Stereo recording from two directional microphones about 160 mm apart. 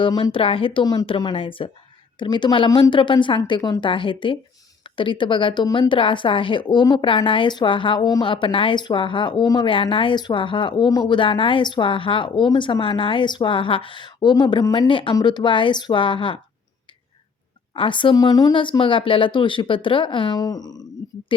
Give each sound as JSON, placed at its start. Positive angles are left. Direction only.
{"t": 0.0, "sound": "a woman's voice", "side_deg": 30}
{"t": 17.7, "sound": "a woman's voice", "side_deg": 30}